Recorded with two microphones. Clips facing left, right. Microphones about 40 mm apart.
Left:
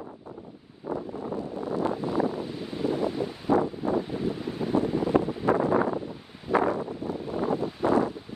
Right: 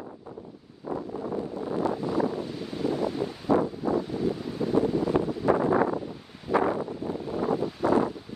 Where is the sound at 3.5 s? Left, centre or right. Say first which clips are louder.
Even; left.